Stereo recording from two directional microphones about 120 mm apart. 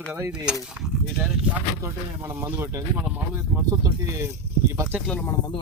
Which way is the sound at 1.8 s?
20° right (ahead or behind).